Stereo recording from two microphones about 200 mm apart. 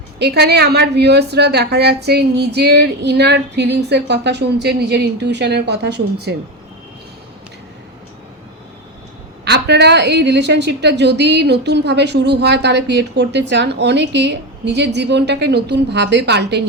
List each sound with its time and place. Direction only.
0.2 s a woman's voice: 55° right (ahead or behind)
9.4 s a woman's voice: 55° right (ahead or behind)